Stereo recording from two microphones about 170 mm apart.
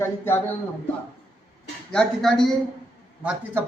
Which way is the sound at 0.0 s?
15° left (ahead or behind).